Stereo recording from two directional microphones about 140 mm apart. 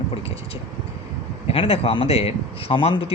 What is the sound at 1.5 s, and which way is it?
Speech, 45° left (ahead or behind).